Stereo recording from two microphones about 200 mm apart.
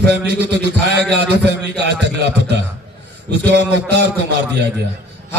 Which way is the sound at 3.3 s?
55° right (ahead or behind).